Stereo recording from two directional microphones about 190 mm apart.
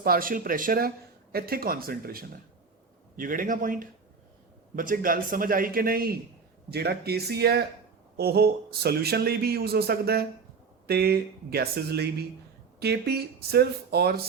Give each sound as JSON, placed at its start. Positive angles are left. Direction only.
{"t": 0.0, "sound": "a man's voice", "side_deg": -50}